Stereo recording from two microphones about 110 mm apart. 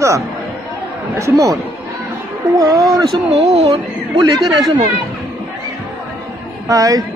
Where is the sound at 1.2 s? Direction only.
30° right (ahead or behind).